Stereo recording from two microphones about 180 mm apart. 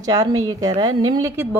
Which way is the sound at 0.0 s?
20° right (ahead or behind).